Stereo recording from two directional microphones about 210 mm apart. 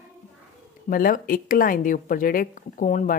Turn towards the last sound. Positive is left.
turn(degrees=40)  # may be behind; listen again after turning